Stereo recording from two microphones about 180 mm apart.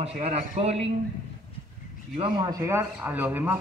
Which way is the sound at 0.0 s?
35° right (ahead or behind).